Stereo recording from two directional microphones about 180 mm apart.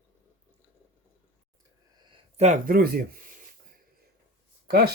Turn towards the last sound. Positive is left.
turn(degrees=-60)  # may be behind; listen again after turning